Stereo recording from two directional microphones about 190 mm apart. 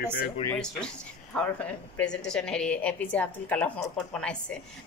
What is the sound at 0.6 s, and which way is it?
A woman's voice, 5° left (ahead or behind).